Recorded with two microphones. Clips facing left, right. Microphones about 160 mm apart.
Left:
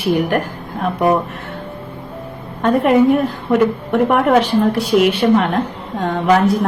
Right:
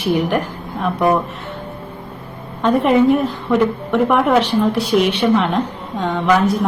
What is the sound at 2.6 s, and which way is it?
A woman's voice, 5° left (ahead or behind).